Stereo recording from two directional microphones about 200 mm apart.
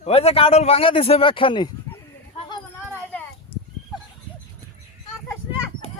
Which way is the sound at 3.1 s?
5° left (ahead or behind).